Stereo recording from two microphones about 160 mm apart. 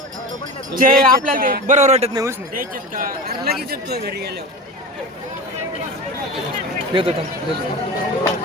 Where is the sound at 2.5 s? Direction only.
60° right (ahead or behind).